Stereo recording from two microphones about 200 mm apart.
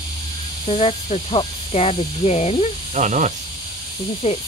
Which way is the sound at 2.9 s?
35° right (ahead or behind).